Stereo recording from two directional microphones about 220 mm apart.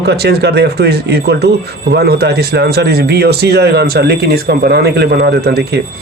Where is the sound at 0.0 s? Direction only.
50° right (ahead or behind).